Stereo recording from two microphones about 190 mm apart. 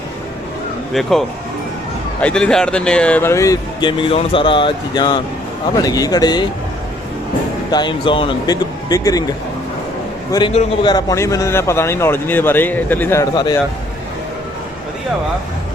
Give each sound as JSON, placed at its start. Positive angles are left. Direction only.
{"t": 2.2, "sound": "a man's voice", "side_deg": 5}
{"t": 7.7, "sound": "speech", "side_deg": 25}
{"t": 10.3, "sound": "a man's voice", "side_deg": 30}